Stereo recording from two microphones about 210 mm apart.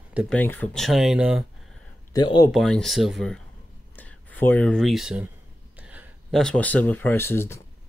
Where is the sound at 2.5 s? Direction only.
Centre (ahead or behind).